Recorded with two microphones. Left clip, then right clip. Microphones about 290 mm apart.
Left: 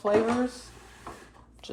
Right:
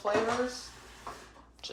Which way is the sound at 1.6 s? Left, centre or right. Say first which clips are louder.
Left 3 dB; left.